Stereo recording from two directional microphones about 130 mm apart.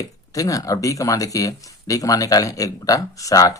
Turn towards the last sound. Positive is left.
turn(degrees=25)  # may be behind; listen again after turning